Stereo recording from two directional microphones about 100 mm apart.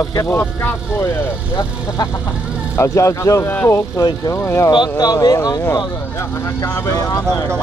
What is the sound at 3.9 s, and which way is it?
Speech, 35° left (ahead or behind).